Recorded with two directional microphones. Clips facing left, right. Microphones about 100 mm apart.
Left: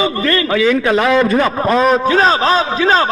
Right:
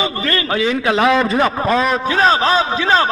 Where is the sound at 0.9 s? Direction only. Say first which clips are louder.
Right 3 dB; 15° right (ahead or behind).